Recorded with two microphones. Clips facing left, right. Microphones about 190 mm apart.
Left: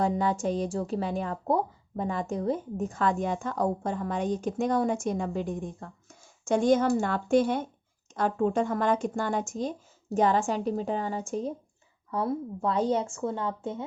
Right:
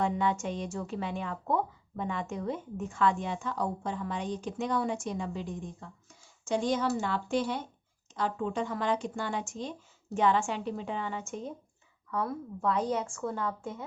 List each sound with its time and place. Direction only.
0.0 s a woman's voice: 35° left (ahead or behind)